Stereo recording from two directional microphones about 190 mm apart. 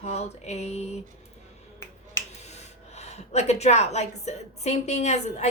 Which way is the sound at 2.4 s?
35° left (ahead or behind).